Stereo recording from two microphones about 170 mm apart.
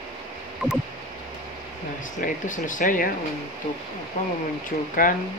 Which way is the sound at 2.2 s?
50° left (ahead or behind).